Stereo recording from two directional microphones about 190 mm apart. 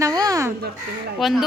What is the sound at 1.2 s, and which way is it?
Speech, centre (ahead or behind).